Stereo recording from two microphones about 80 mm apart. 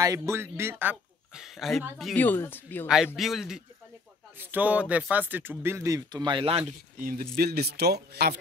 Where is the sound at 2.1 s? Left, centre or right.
Left.